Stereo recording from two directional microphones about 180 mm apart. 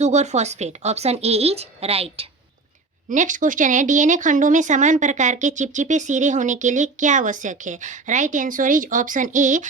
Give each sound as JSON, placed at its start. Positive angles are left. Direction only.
{"t": 0.0, "sound": "a woman's voice", "side_deg": -40}
{"t": 3.1, "sound": "speech", "side_deg": -45}